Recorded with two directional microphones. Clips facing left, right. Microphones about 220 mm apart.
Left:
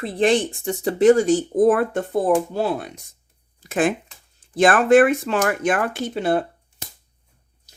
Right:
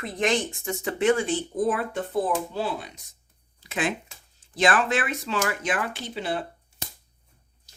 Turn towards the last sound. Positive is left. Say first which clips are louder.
# left 9 dB
turn(degrees=55)  # may be behind; listen again after turning